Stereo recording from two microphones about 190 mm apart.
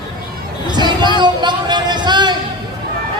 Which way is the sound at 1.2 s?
25° right (ahead or behind).